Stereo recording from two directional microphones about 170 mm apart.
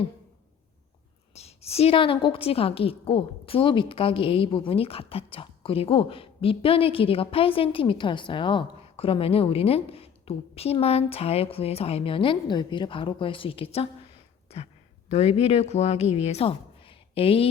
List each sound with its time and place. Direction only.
1.3 s a woman's voice: 40° left (ahead or behind)
15.1 s speech: 40° left (ahead or behind)